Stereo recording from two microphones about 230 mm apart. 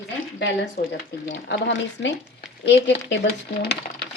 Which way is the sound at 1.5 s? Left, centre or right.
Left.